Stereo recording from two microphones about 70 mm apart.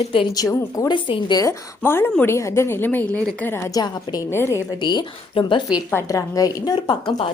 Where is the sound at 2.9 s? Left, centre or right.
Left.